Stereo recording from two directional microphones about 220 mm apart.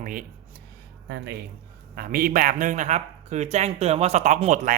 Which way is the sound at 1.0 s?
50° right (ahead or behind).